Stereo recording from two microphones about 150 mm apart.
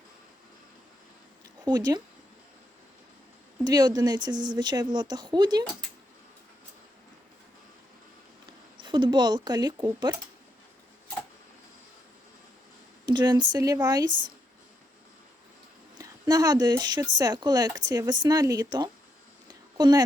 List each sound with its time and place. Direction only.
1.6 s speech: 25° right (ahead or behind)
3.6 s speech: 25° right (ahead or behind)
8.8 s speech: 30° right (ahead or behind)
13.1 s speech: 30° right (ahead or behind)
16.0 s speech: 25° right (ahead or behind)